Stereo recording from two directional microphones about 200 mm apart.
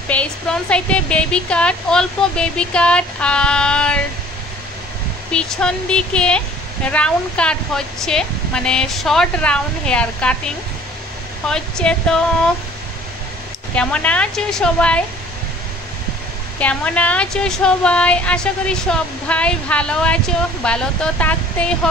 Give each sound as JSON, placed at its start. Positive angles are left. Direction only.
{"t": 0.1, "sound": "a woman's voice", "side_deg": 5}
{"t": 5.3, "sound": "a woman's voice", "side_deg": 5}
{"t": 13.7, "sound": "a woman's voice", "side_deg": 5}
{"t": 16.5, "sound": "a woman's voice", "side_deg": 5}